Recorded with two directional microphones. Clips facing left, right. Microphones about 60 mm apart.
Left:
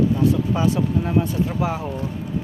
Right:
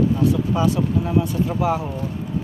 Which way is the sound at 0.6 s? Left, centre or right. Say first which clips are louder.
Right 1 dB; left.